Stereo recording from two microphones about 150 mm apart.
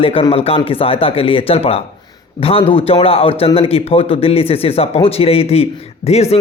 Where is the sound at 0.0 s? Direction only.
40° left (ahead or behind).